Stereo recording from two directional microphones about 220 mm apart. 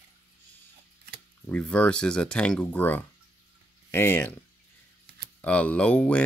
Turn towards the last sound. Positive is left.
turn(degrees=5)  # may be behind; listen again after turning